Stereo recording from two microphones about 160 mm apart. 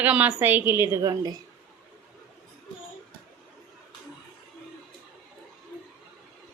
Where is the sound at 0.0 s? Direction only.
10° right (ahead or behind).